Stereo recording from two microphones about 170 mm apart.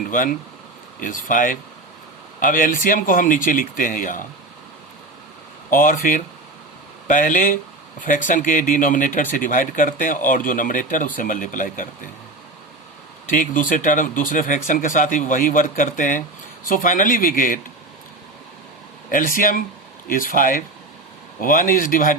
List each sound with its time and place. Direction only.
0.1 s speech: 50° left (ahead or behind)
5.7 s speech: 55° left (ahead or behind)
13.3 s speech: 50° left (ahead or behind)
19.1 s speech: 55° left (ahead or behind)